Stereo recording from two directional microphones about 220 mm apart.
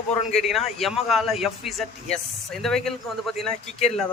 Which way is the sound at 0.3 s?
Centre (ahead or behind).